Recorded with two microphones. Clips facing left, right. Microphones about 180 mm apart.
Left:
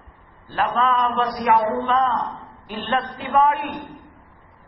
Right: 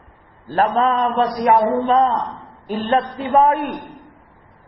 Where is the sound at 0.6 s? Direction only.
40° right (ahead or behind).